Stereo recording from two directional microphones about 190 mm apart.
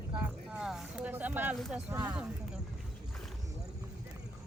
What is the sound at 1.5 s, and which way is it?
Speech, centre (ahead or behind).